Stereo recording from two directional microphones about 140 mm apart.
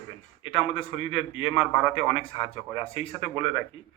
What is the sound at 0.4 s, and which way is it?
A man's voice, 40° left (ahead or behind).